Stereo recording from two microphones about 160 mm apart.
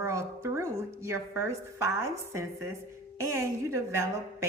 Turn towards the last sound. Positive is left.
turn(degrees=-15)  # may be behind; listen again after turning